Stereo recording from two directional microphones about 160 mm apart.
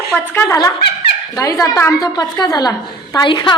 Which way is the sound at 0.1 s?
15° left (ahead or behind).